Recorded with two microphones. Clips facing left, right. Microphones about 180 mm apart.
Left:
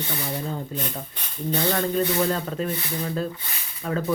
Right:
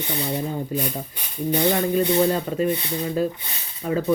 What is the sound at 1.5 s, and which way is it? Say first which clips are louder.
Speech: right 3 dB; 15° right (ahead or behind).